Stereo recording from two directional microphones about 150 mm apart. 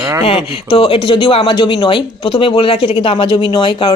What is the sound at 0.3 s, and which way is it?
Speech, 40° left (ahead or behind).